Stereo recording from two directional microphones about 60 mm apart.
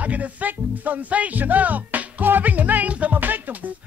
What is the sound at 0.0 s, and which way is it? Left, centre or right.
Music, right.